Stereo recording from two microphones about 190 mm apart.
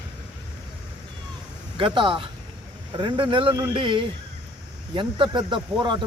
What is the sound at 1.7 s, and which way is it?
Speech, 25° right (ahead or behind).